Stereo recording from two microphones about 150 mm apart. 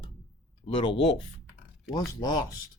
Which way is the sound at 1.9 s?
25° left (ahead or behind).